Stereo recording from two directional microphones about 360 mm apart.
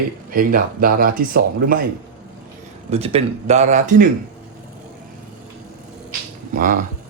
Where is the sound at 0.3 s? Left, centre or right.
Right.